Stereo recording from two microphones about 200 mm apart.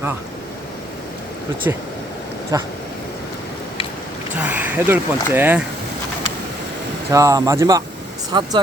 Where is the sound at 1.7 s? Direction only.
15° right (ahead or behind).